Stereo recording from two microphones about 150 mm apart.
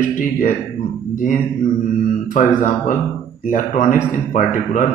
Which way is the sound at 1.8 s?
60° left (ahead or behind).